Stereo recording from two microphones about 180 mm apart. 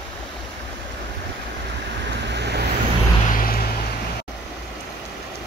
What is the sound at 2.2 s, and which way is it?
Vehicle, 70° right (ahead or behind).